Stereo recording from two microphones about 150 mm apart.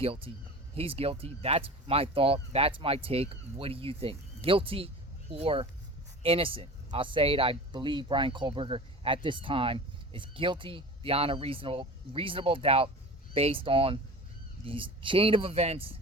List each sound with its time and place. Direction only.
0.0 s speech: 40° right (ahead or behind)